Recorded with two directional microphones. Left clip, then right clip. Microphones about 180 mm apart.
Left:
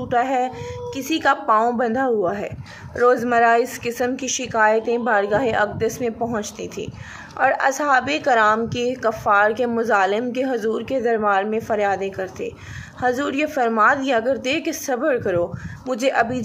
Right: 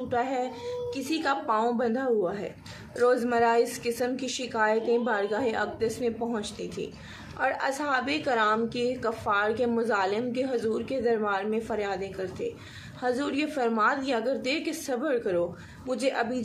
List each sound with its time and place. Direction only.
0.1 s a woman's voice: 45° left (ahead or behind)